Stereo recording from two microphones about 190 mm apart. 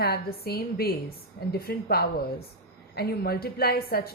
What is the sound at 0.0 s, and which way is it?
A woman's voice, 55° left (ahead or behind).